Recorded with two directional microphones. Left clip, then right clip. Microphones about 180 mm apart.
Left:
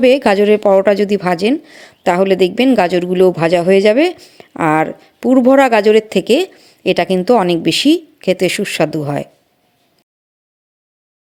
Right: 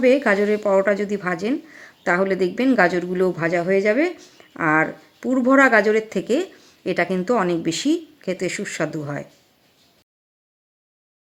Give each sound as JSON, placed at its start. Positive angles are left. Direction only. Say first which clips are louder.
{"t": 0.0, "sound": "a woman's voice", "louder": "left 7 dB", "side_deg": 35}